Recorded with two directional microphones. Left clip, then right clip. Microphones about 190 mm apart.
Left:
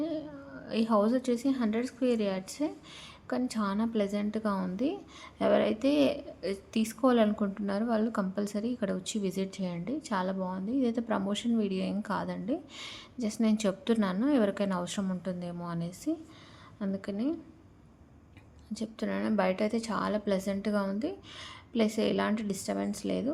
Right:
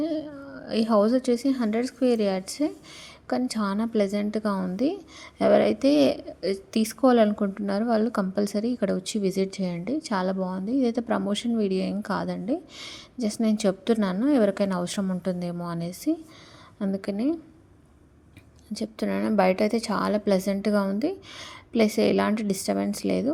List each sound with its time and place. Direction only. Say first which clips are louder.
0.0 s a woman's voice: right 6 dB; 30° right (ahead or behind)
18.7 s a woman's voice: right 6 dB; 30° right (ahead or behind)